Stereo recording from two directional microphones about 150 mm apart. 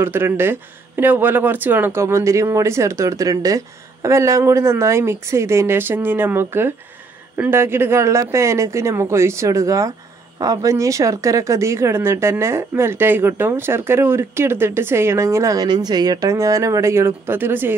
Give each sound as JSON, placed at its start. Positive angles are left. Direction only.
{"t": 0.0, "sound": "speech", "side_deg": -15}